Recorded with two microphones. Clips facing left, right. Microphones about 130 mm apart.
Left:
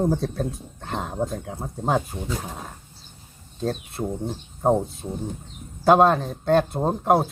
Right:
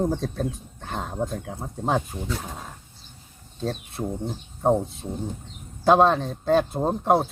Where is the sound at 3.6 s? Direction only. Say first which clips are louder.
Left 2 dB; centre (ahead or behind).